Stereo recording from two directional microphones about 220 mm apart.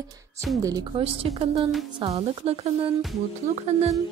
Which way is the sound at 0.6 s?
20° right (ahead or behind).